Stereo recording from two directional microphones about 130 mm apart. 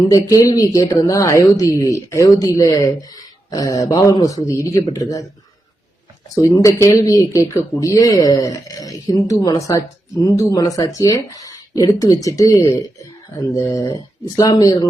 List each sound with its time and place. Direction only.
0.1 s speech: 25° left (ahead or behind)
6.3 s speech: 25° left (ahead or behind)